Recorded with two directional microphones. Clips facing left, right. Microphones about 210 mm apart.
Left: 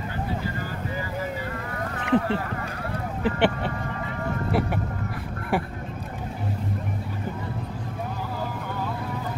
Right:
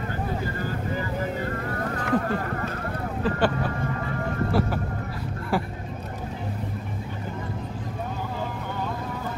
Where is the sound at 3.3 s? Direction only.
25° left (ahead or behind).